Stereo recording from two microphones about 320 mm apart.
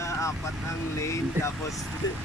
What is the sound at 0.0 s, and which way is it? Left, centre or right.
Speech, centre.